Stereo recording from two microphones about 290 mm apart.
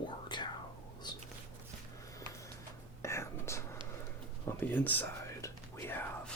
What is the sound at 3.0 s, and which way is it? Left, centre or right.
Whispering, centre.